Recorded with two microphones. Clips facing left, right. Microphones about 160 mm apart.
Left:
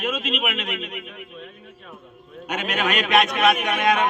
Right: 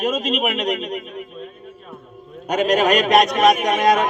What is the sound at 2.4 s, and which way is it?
A man's voice, 40° right (ahead or behind).